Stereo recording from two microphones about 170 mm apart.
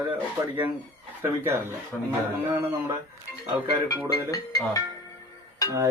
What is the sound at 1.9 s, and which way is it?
Speech, 10° left (ahead or behind).